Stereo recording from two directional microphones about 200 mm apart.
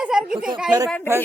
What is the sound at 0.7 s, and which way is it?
Music, 15° right (ahead or behind).